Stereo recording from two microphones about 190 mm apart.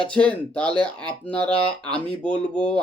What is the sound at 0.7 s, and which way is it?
Speech, 25° right (ahead or behind).